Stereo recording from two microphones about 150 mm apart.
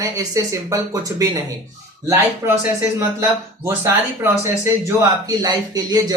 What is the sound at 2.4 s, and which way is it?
A man's voice, 20° right (ahead or behind).